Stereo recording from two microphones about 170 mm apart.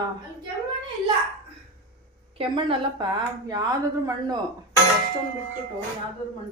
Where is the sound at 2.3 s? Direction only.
30° right (ahead or behind).